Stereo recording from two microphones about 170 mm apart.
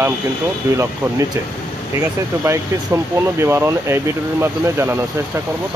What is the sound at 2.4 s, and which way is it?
Speech, 15° right (ahead or behind).